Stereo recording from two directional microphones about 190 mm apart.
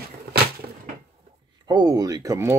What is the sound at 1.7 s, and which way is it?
Speech, 20° right (ahead or behind).